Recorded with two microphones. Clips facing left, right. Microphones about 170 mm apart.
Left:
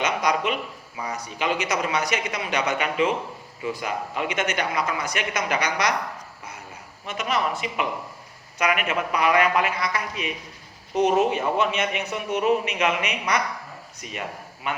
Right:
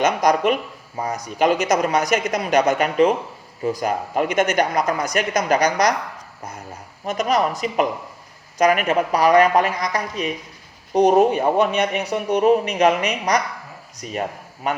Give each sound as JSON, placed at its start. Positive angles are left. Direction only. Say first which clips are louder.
{"t": 0.0, "sound": "a man's voice", "louder": "right 6 dB", "side_deg": -45}
{"t": 7.0, "sound": "a man's voice", "louder": "right 6 dB", "side_deg": -40}